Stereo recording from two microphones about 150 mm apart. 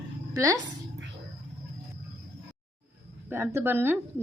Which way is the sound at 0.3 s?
20° right (ahead or behind).